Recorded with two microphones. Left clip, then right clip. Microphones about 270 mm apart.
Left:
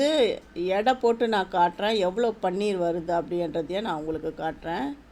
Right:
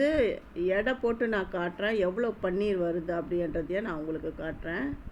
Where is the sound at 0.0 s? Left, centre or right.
Centre.